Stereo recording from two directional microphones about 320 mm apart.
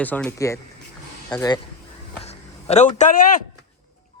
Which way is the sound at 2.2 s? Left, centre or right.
Centre.